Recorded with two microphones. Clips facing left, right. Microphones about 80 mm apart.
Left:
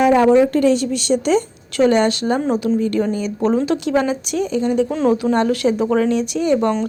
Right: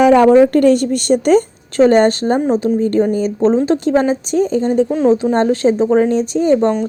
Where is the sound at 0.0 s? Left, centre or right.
Right.